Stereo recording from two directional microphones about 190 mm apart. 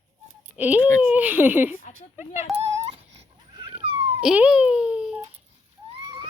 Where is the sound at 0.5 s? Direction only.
10° right (ahead or behind).